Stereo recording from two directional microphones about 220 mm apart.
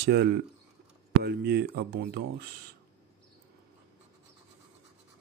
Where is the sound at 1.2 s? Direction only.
45° right (ahead or behind).